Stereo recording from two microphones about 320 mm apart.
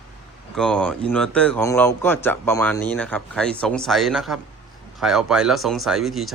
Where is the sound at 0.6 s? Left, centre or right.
Centre.